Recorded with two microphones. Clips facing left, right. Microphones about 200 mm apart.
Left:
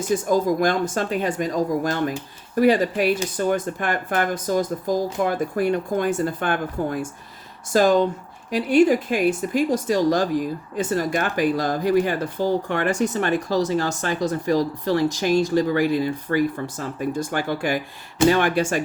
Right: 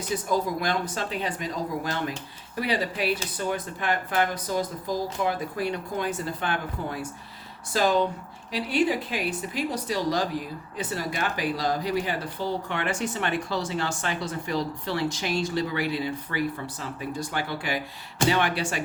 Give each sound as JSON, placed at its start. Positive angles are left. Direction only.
{"t": 0.1, "sound": "speech", "side_deg": 45}